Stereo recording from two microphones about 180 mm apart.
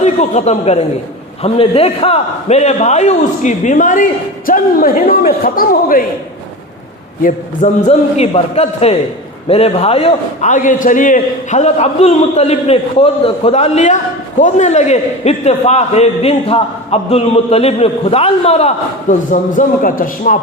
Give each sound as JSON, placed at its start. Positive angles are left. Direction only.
{"t": 0.0, "sound": "a man's voice", "side_deg": 40}
{"t": 7.2, "sound": "a man's voice", "side_deg": 45}